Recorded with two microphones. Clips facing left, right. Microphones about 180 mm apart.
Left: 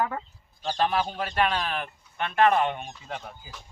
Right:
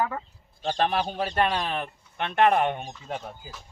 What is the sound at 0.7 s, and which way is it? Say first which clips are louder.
Speech: even; 40° right (ahead or behind).